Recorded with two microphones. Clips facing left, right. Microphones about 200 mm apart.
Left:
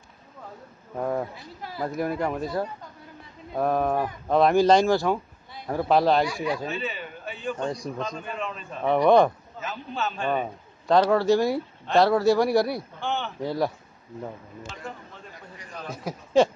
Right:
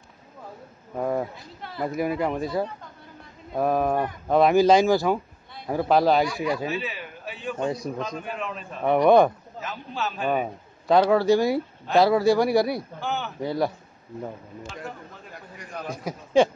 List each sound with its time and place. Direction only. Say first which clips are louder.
0.9 s a man's voice: right 1 dB; 5° right (ahead or behind)
1.6 s a man's voice: right 2 dB; 5° left (ahead or behind)
16.0 s a man's voice: even; centre (ahead or behind)